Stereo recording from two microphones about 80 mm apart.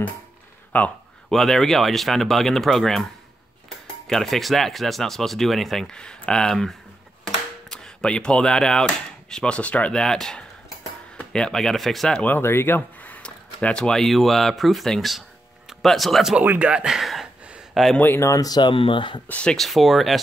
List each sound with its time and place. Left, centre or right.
0.7 s speech: centre
1.3 s speech: centre
12.4 s speech: left; by 16.3 s centre
16.3 s speech: centre
17.9 s speech: left
18.2 s speech: left
18.5 s speech: left
19.2 s speech: centre
19.5 s speech: centre